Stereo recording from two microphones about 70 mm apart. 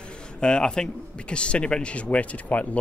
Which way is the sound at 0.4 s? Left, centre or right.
Centre.